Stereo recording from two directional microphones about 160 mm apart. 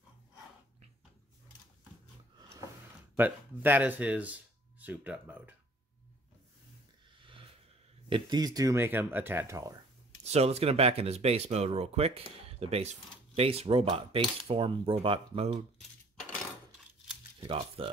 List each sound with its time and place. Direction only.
3.2 s speech: 10° right (ahead or behind)
7.2 s a sound: 30° right (ahead or behind)
8.1 s speech: 25° right (ahead or behind)
10.2 s speech: 40° right (ahead or behind)
17.4 s speech: 35° right (ahead or behind)